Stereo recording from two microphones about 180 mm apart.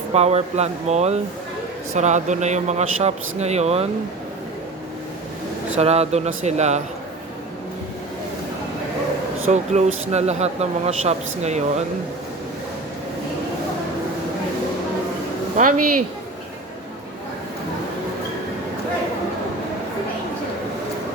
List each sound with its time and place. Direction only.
0.1 s speech: 35° right (ahead or behind)
5.8 s speech: 35° right (ahead or behind)
9.5 s speech: 40° right (ahead or behind)
15.5 s speech: 45° right (ahead or behind)